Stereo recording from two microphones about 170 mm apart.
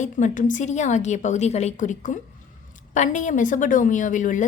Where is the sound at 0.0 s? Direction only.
45° left (ahead or behind).